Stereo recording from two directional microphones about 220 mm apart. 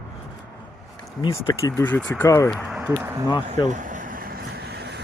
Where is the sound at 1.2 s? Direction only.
15° left (ahead or behind).